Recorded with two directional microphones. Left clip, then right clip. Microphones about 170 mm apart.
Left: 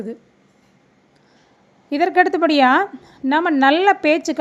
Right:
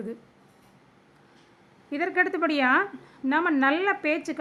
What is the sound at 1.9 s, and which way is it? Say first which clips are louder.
A woman's voice: left 10 dB; 30° left (ahead or behind).